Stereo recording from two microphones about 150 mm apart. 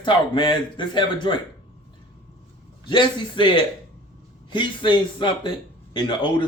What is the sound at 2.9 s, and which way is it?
Speech, 30° left (ahead or behind).